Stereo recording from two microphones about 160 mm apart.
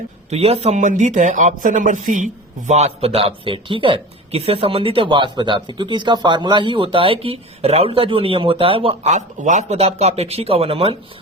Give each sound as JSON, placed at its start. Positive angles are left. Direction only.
{"t": 0.3, "sound": "speech", "side_deg": -40}